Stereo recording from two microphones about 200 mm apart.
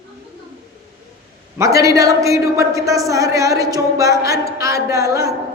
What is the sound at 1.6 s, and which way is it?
A man's voice, 15° right (ahead or behind).